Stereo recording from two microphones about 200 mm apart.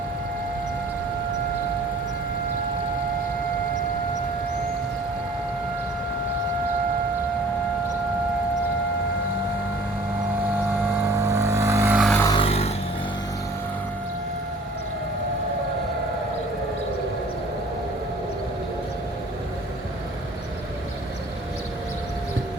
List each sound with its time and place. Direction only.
11.2 s vehicle: 15° right (ahead or behind)
12.1 s vehicle: 15° left (ahead or behind)
12.4 s a sound: 30° left (ahead or behind)